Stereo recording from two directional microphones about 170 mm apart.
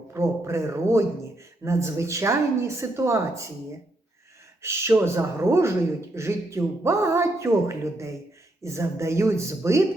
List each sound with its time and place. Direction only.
0.1 s speech: 15° right (ahead or behind)
4.6 s speech: 15° right (ahead or behind)